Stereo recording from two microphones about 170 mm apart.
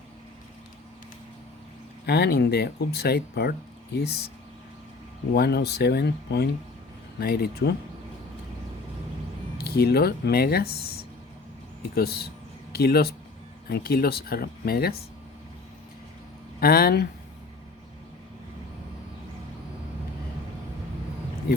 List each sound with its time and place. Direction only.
2.0 s speech: 70° left (ahead or behind)
5.3 s speech: 70° left (ahead or behind)
7.2 s speech: 65° left (ahead or behind)
9.6 s speech: 65° left (ahead or behind)
11.9 s speech: 65° left (ahead or behind)
16.6 s speech: 60° left (ahead or behind)